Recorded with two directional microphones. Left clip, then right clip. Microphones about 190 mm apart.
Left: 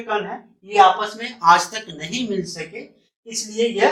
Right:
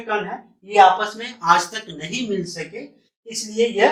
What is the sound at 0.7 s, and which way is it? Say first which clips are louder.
Speech: right 1 dB; 15° left (ahead or behind).